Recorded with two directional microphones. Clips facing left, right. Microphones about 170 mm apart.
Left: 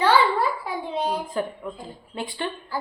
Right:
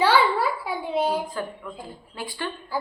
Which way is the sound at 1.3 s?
25° left (ahead or behind).